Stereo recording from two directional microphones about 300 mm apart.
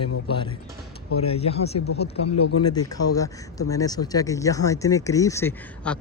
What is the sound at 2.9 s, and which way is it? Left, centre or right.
Speech, centre.